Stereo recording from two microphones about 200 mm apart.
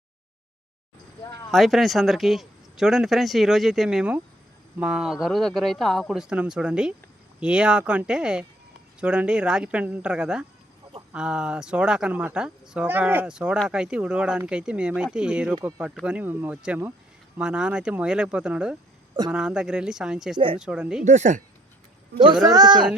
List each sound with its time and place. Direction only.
1.5 s speech: centre (ahead or behind)
21.0 s speech: 35° right (ahead or behind)